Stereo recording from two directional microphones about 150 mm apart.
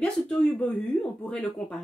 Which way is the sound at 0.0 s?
10° left (ahead or behind).